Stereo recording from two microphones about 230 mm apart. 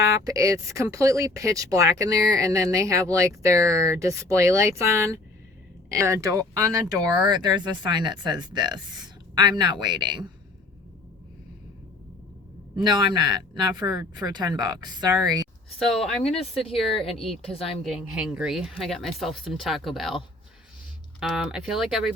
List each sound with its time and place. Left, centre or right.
0.0 s speech: centre
12.7 s speech: centre
15.9 s speech: centre
17.4 s speech: left
17.8 s speech: centre
21.2 s speech: centre